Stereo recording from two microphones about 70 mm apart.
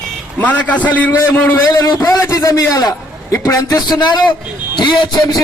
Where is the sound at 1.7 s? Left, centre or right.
Left.